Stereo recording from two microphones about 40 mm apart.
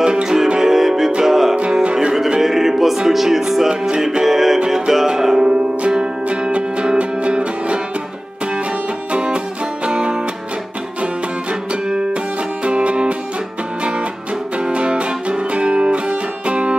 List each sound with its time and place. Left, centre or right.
0.0 s music: centre
1.6 s music: right
2.4 s music: centre
5.5 s music: right
9.1 s music: right
11.7 s music: right
14.6 s music: right